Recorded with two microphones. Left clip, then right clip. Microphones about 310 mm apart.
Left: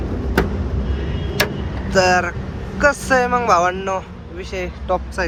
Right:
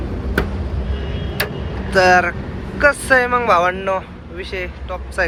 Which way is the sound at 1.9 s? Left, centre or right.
Centre.